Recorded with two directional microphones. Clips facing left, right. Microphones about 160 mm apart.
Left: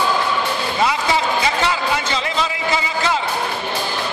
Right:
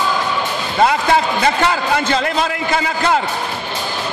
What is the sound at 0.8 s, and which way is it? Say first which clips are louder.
A man's voice: right 4 dB; 55° right (ahead or behind).